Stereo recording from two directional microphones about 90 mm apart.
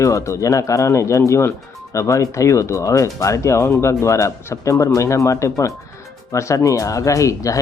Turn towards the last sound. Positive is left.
turn(degrees=35)  # may be behind; listen again after turning